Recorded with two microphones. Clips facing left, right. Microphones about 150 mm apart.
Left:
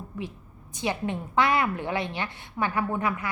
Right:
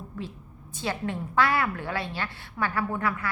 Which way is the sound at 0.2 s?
15° left (ahead or behind).